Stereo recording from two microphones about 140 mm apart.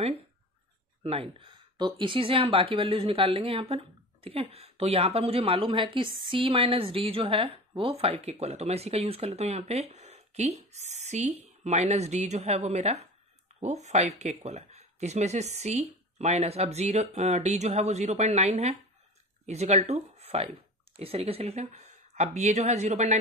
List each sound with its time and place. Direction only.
1.0 s speech: 45° right (ahead or behind)